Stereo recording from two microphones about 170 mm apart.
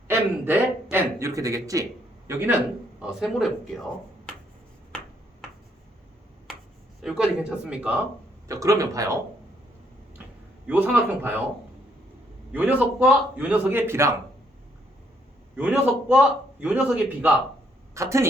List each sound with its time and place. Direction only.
0.1 s a sound: 10° right (ahead or behind)
3.0 s speech: 5° right (ahead or behind)
7.0 s speech: 5° right (ahead or behind)
8.4 s speech: 20° right (ahead or behind)
10.7 s a man's voice: 10° right (ahead or behind)
12.5 s a man's voice: 10° right (ahead or behind)
15.5 s a man's voice: 10° right (ahead or behind)